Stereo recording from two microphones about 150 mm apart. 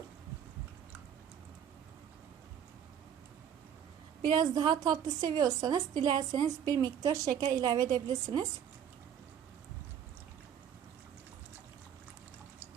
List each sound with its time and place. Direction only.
4.2 s a woman's voice: 25° right (ahead or behind)